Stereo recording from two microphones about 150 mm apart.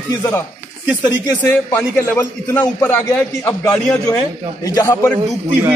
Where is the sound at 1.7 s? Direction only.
15° left (ahead or behind).